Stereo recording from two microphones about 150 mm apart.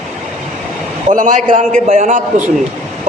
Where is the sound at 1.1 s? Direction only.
60° right (ahead or behind).